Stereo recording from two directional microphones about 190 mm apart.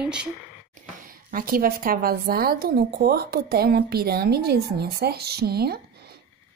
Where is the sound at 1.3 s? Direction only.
50° right (ahead or behind).